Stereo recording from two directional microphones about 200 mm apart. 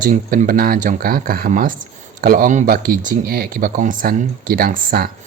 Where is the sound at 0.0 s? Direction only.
45° right (ahead or behind).